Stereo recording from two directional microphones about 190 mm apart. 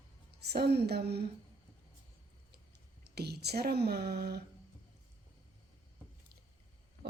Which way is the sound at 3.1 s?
60° right (ahead or behind).